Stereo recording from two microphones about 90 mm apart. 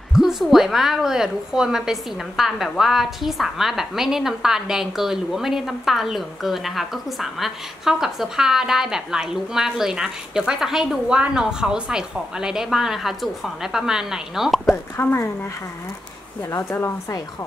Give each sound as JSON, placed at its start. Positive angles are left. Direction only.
{"t": 0.1, "sound": "a woman's voice", "side_deg": -5}
{"t": 15.0, "sound": "a woman's voice", "side_deg": 30}
{"t": 16.4, "sound": "a woman's voice", "side_deg": 30}